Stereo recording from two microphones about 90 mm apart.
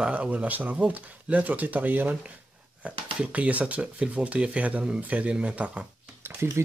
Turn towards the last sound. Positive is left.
turn(degrees=-30)  # may be behind; listen again after turning